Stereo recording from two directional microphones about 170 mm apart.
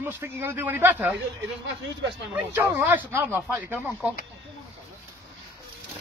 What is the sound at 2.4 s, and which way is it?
A man's voice, 10° right (ahead or behind).